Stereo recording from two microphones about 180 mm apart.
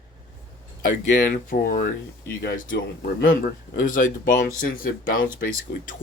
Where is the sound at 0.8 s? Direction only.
50° left (ahead or behind).